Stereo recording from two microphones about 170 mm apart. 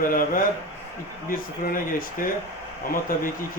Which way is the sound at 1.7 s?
55° left (ahead or behind).